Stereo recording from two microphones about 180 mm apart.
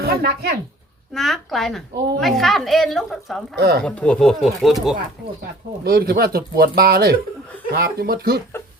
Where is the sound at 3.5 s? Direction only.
60° right (ahead or behind).